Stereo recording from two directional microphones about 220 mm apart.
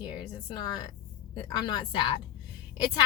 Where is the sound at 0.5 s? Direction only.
20° left (ahead or behind).